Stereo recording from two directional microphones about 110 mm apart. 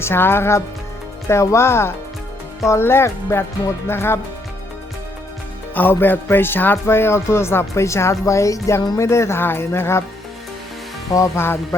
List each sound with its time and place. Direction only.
0.0 s speech: 20° left (ahead or behind)
5.7 s speech: 20° left (ahead or behind)
11.1 s speech: 25° left (ahead or behind)